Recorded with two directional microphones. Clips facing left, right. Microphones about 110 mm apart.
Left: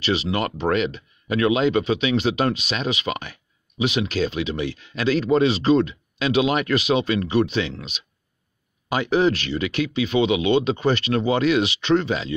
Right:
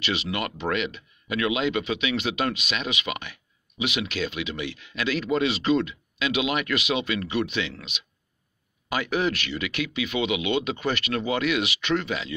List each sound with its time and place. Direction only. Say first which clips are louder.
0.0 s speech: left 6 dB; 35° left (ahead or behind)